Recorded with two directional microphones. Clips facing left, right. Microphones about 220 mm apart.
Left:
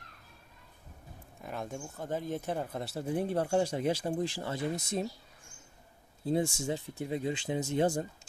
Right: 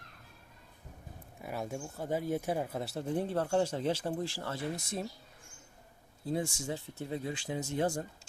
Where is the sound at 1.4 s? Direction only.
5° right (ahead or behind); by 5.1 s 20° left (ahead or behind).